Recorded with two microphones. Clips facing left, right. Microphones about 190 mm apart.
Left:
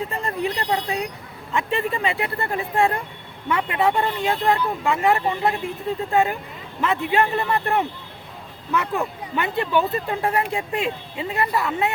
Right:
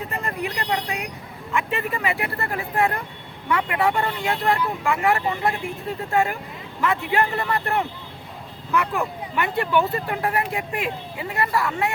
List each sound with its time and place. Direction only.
0.2 s speech: 30° left (ahead or behind)